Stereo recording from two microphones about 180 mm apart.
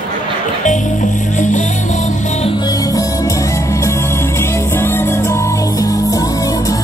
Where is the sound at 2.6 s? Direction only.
20° left (ahead or behind).